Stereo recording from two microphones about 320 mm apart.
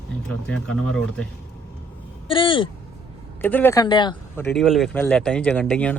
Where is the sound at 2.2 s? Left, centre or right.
Centre.